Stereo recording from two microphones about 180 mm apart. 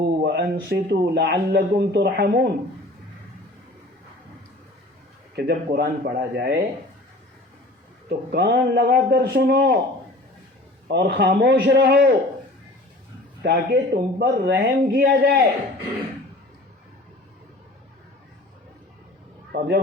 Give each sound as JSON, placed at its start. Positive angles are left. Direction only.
{"t": 0.0, "sound": "a sound", "side_deg": -65}
{"t": 0.7, "sound": "speech", "side_deg": -65}
{"t": 5.4, "sound": "speech", "side_deg": -65}
{"t": 8.3, "sound": "speech", "side_deg": -65}
{"t": 10.8, "sound": "a man's voice", "side_deg": -70}
{"t": 13.4, "sound": "speech", "side_deg": -65}
{"t": 14.8, "sound": "a man's voice", "side_deg": -50}
{"t": 15.2, "sound": "speech", "side_deg": -65}
{"t": 19.5, "sound": "speech", "side_deg": -65}